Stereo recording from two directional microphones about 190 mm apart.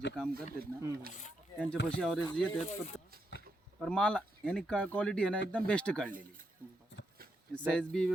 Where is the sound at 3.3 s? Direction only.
70° left (ahead or behind).